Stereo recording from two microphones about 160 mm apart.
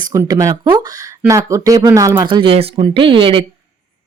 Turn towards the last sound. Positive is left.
turn(degrees=-35)  # may be behind; listen again after turning